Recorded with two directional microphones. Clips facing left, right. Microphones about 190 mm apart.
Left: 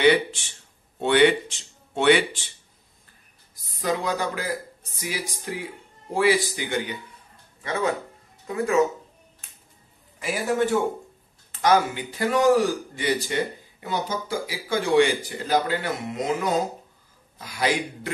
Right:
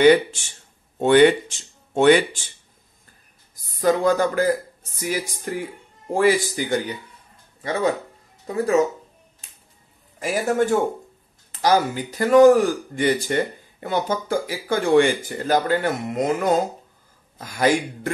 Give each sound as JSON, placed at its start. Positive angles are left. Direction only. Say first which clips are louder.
{"t": 0.0, "sound": "speech", "louder": "right 5 dB", "side_deg": -45}
{"t": 3.7, "sound": "a man's voice", "louder": "right 7 dB", "side_deg": -45}
{"t": 8.5, "sound": "speech", "louder": "right 3 dB", "side_deg": -35}
{"t": 10.1, "sound": "a man's voice", "louder": "right 3 dB", "side_deg": -45}